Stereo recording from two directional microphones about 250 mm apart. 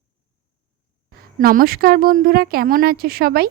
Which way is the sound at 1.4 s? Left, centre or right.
Right.